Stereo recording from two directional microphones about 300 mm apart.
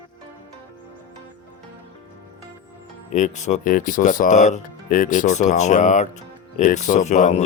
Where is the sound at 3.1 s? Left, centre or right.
Left.